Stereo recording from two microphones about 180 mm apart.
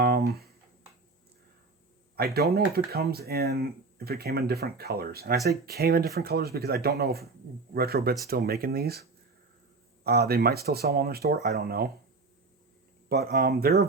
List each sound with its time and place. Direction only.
0.0 s a sound: 60° right (ahead or behind)
2.1 s speech: 60° right (ahead or behind)
13.1 s speech: 65° right (ahead or behind)